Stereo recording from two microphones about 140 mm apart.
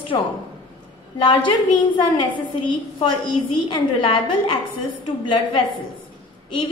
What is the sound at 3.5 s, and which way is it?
Speech, 35° left (ahead or behind).